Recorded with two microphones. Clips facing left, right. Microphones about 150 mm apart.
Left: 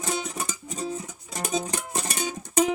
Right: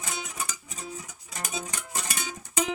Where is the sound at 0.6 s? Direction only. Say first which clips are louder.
Left 8 dB; 35° left (ahead or behind).